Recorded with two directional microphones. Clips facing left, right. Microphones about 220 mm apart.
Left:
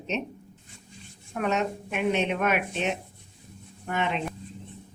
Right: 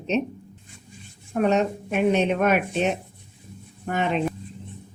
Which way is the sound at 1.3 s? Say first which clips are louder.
Right 6 dB; 35° right (ahead or behind).